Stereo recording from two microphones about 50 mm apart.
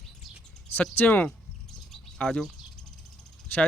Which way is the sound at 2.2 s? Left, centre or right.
Left.